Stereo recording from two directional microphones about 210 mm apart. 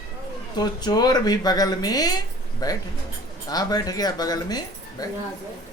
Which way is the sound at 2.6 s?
15° left (ahead or behind).